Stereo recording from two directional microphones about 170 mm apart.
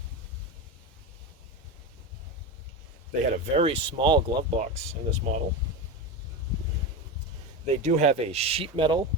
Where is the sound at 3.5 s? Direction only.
35° right (ahead or behind).